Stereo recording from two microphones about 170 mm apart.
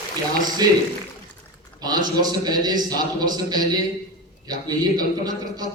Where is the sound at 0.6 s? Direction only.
20° right (ahead or behind).